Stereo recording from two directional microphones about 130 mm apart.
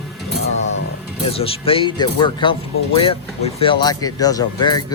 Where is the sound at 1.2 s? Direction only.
45° left (ahead or behind).